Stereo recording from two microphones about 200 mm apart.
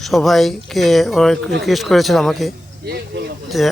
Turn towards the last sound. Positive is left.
turn(degrees=0)  # may be behind; listen again after turning